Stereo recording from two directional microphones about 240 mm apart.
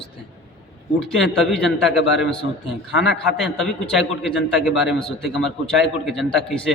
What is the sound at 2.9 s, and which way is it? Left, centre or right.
Speech, left.